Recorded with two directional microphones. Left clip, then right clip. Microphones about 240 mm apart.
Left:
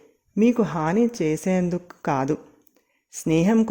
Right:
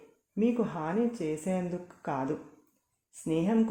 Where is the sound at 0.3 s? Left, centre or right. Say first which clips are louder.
Left 9 dB; left.